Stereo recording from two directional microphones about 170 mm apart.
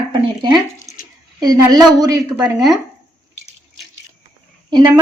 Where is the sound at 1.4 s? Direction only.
20° right (ahead or behind).